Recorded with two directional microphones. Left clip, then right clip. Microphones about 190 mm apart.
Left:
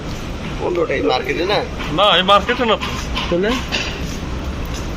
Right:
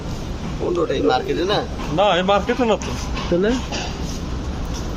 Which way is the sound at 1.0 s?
75° right (ahead or behind).